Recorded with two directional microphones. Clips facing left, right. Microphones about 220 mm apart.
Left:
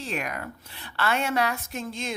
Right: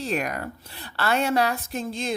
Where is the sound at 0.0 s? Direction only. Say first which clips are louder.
Right 5 dB; 40° right (ahead or behind).